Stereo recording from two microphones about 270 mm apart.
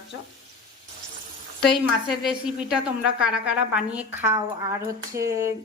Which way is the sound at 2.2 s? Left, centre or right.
Centre.